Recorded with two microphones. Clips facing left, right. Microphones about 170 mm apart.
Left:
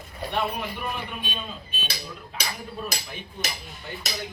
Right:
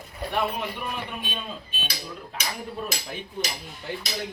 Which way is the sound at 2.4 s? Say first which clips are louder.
Even; 35° left (ahead or behind).